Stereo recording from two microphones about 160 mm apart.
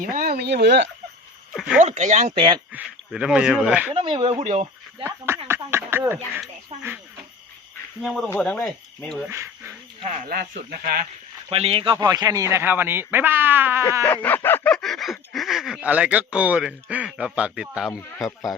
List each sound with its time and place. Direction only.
0.0 s speech: 60° right (ahead or behind); by 0.9 s 90° right
1.5 s speech: 5° right (ahead or behind)
1.8 s speech: 45° right (ahead or behind)
2.7 s speech: 5° right (ahead or behind)
3.9 s speech: 35° right (ahead or behind)
5.0 s speech: 15° right (ahead or behind)
5.5 s a sound: 15° right (ahead or behind)
8.0 s speech: centre (ahead or behind)
9.2 s speech: 15° right (ahead or behind)
10.0 s speech: 45° right (ahead or behind)
10.2 s speech: 65° right (ahead or behind)
11.5 s speech: 35° right (ahead or behind); by 13.8 s 10° right (ahead or behind)
14.0 s speech: 10° left (ahead or behind)